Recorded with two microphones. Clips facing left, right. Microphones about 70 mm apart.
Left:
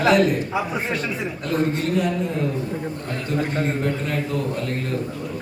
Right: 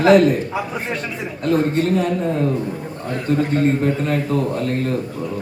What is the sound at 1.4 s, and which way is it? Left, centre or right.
Speech, right.